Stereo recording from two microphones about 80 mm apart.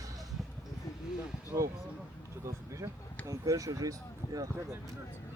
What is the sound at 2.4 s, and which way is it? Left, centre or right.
Speech, right.